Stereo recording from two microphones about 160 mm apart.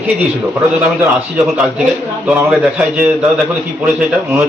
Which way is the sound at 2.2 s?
10° right (ahead or behind).